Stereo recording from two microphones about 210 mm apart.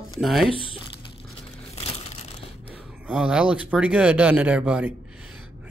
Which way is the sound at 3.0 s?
5° right (ahead or behind).